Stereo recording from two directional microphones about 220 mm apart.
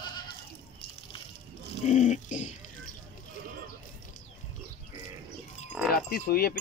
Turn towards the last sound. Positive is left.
turn(degrees=45)  # may be behind; listen again after turning